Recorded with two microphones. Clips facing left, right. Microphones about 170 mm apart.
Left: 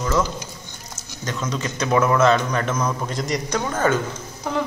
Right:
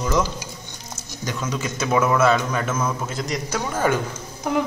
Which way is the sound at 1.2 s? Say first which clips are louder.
Even; 10° right (ahead or behind).